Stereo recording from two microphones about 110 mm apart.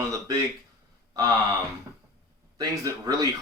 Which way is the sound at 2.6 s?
30° right (ahead or behind).